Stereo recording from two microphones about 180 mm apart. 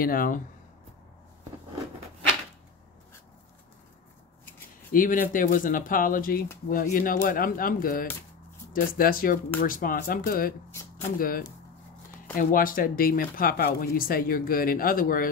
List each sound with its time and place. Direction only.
0.0 s speech: 50° left (ahead or behind)
4.9 s speech: 50° left (ahead or behind)
10.7 s a sound: 15° left (ahead or behind)
11.1 s speech: 55° left (ahead or behind)